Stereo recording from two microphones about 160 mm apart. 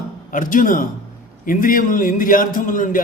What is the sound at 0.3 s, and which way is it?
A man's voice, 55° left (ahead or behind).